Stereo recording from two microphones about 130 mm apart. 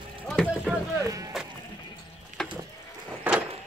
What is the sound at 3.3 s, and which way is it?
Vehicle, 15° right (ahead or behind).